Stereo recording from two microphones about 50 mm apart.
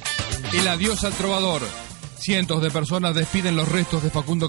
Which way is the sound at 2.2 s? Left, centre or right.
Right.